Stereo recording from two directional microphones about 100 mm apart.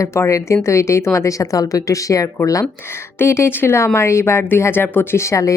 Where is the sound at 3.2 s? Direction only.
25° left (ahead or behind).